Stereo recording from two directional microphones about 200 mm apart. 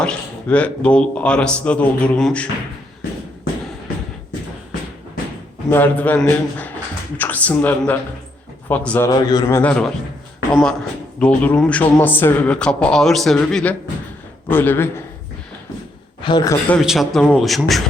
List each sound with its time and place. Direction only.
0.0 s speech: 5° left (ahead or behind)
5.7 s speech: 10° left (ahead or behind)
9.0 s a man's voice: 15° left (ahead or behind)
16.2 s speech: 20° left (ahead or behind)
16.6 s speech: centre (ahead or behind)